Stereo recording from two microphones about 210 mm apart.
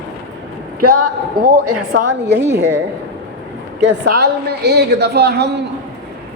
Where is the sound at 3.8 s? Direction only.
55° right (ahead or behind).